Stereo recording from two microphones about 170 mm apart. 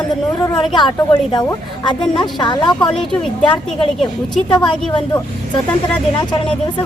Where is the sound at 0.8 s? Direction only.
25° left (ahead or behind).